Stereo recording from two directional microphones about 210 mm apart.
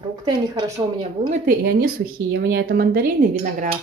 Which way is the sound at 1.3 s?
40° right (ahead or behind).